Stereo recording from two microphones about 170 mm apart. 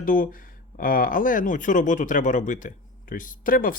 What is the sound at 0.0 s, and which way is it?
Speech, 55° left (ahead or behind).